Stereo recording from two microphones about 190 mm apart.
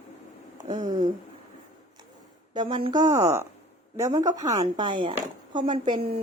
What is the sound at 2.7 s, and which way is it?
A woman's voice, 25° right (ahead or behind).